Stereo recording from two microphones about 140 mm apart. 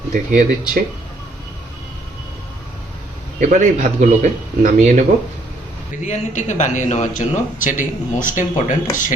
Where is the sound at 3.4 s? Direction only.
60° right (ahead or behind).